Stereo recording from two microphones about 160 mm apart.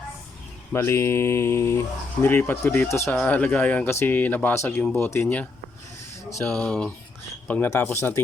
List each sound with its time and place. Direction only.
0.7 s speech: 15° left (ahead or behind)